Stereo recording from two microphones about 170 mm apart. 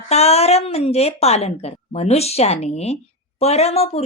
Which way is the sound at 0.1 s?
40° left (ahead or behind).